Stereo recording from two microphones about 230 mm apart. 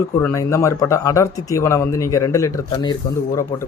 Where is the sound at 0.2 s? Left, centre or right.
Centre.